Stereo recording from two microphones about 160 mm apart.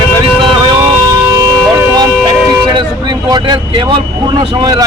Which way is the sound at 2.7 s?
25° right (ahead or behind).